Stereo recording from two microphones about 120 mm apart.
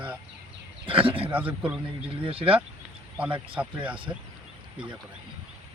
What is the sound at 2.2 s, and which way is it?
Speech, 50° right (ahead or behind).